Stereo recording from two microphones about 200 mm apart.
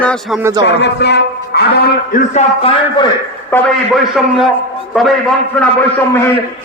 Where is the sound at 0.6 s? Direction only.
60° left (ahead or behind).